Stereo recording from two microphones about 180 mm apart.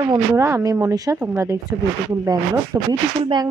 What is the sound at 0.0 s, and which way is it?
A woman's voice, 25° right (ahead or behind).